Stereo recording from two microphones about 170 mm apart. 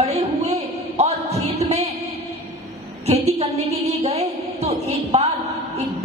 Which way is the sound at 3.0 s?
40° right (ahead or behind).